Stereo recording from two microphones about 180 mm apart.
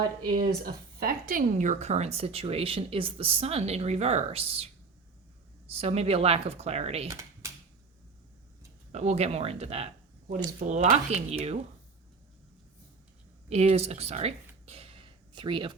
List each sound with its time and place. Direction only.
0.3 s speech: 50° right (ahead or behind); by 4.7 s 35° right (ahead or behind)
5.7 s speech: 35° right (ahead or behind)
7.1 s typing: 15° right (ahead or behind)
8.9 s speech: 40° right (ahead or behind)
13.5 s speech: 35° right (ahead or behind)